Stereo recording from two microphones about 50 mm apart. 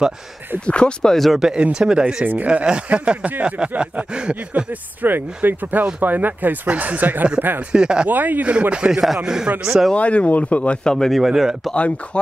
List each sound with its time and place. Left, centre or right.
0.7 s speech: left
1.1 s speech: centre
1.6 s speech: centre
2.2 s speech: right
5.0 s speech: right
7.7 s speech: centre
8.1 s speech: right
8.5 s speech: right
9.0 s speech: centre
9.9 s speech: left
11.1 s speech: centre
11.7 s speech: left